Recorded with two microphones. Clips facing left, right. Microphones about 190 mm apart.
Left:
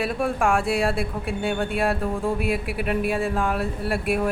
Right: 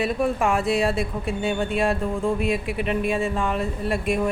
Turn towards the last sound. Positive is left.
turn(degrees=5)  # may be behind; listen again after turning